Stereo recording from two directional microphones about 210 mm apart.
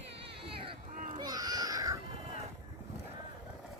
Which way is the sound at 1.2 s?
20° right (ahead or behind).